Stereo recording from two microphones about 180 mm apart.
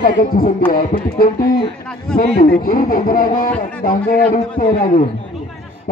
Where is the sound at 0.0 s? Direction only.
50° left (ahead or behind).